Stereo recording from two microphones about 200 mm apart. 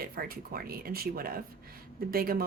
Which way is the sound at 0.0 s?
50° right (ahead or behind).